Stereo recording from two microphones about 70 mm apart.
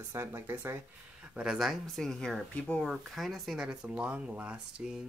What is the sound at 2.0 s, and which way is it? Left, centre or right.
Speech, centre.